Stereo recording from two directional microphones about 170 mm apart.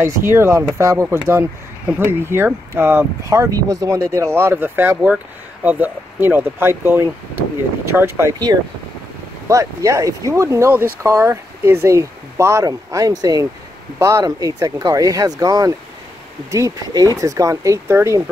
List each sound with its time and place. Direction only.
0.0 s speech: 15° right (ahead or behind)